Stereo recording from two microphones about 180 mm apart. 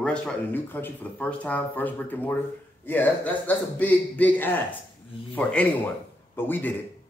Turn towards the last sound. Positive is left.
turn(degrees=10)  # may be behind; listen again after turning